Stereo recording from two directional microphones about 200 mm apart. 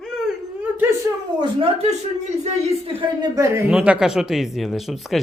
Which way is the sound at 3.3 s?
10° right (ahead or behind).